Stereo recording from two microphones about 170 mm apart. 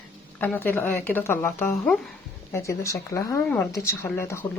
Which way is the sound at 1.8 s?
Centre (ahead or behind).